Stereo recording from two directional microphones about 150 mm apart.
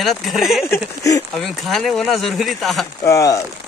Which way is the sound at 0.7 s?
20° left (ahead or behind).